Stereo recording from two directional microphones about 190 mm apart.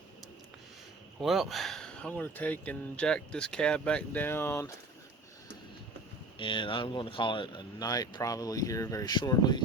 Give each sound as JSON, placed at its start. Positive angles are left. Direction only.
{"t": 1.2, "sound": "speech", "side_deg": 0}
{"t": 6.4, "sound": "speech", "side_deg": 25}